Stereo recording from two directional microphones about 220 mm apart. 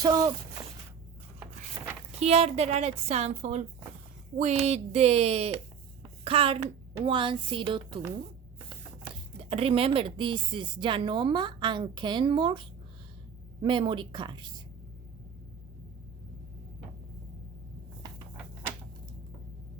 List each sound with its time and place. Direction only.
0.0 s speech: 15° right (ahead or behind)
1.7 s a sound: 10° right (ahead or behind)
2.1 s a woman's voice: 30° right (ahead or behind)